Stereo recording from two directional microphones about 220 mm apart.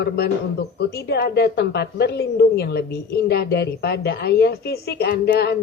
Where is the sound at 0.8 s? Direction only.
50° left (ahead or behind).